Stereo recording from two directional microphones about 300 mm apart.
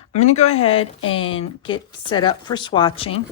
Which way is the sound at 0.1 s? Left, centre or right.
Left.